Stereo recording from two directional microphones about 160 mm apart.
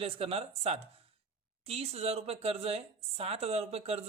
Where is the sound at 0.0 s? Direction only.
35° right (ahead or behind).